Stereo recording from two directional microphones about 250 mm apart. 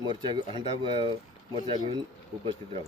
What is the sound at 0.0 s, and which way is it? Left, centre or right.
Speech, centre.